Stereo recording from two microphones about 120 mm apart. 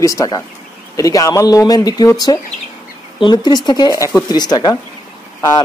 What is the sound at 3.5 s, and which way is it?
Speech, 35° left (ahead or behind).